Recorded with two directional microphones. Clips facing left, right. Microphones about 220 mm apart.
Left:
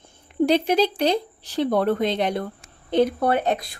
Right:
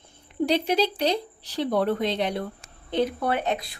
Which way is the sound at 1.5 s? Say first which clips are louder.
Left 3 dB; 50° left (ahead or behind).